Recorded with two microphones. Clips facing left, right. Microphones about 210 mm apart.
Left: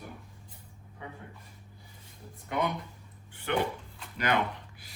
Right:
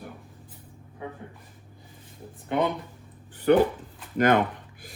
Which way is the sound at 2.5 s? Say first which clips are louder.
Right 6 dB; 30° right (ahead or behind).